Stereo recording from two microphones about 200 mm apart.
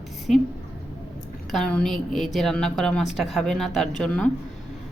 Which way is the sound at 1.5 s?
5° left (ahead or behind).